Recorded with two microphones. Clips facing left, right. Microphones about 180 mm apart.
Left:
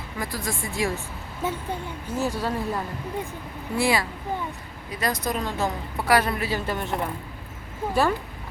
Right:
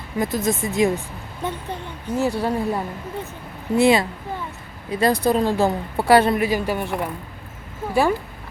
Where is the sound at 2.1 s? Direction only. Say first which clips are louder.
Right 5 dB; 15° right (ahead or behind).